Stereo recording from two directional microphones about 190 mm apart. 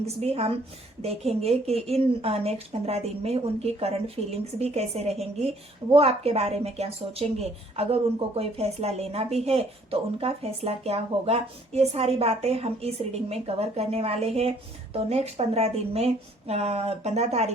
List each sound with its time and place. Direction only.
0.0 s speech: 35° right (ahead or behind)